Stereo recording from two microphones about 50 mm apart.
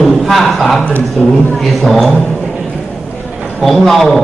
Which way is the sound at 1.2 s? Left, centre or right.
Centre.